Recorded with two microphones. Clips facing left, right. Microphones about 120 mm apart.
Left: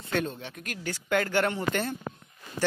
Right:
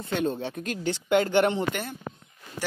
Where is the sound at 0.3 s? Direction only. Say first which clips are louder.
Right 8 dB; 30° right (ahead or behind).